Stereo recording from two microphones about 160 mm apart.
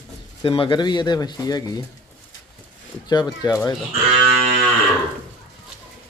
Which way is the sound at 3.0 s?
25° left (ahead or behind).